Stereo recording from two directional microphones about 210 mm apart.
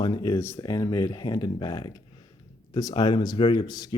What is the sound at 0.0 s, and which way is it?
A man's voice, 20° left (ahead or behind).